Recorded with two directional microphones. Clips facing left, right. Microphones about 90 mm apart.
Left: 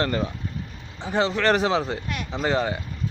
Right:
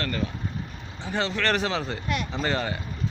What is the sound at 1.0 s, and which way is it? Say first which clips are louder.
Speech: left 5 dB; 10° left (ahead or behind).